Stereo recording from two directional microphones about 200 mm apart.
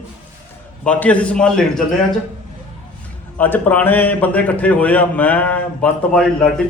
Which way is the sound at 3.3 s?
10° left (ahead or behind).